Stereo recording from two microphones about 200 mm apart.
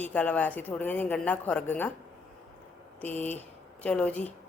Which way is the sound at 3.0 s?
10° left (ahead or behind).